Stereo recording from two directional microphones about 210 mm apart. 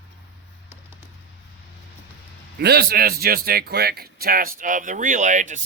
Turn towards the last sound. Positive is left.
turn(degrees=-35)  # may be behind; listen again after turning